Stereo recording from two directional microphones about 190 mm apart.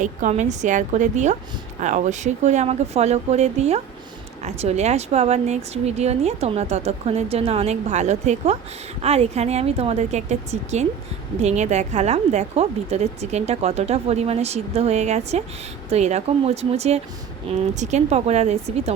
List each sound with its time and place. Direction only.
0.0 s a woman's voice: 40° right (ahead or behind)